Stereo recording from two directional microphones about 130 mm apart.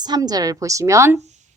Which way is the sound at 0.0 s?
30° right (ahead or behind).